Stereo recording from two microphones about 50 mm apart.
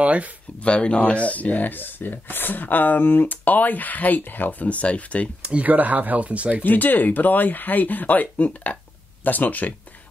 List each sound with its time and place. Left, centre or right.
0.0 s speech: right
0.6 s speech: left
5.4 s speech: right
5.7 s speech: right
6.6 s speech: left